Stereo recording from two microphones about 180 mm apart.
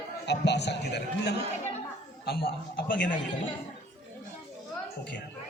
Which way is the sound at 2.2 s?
60° left (ahead or behind).